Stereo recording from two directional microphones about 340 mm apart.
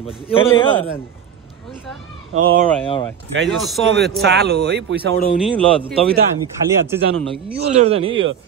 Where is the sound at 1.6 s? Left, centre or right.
Centre.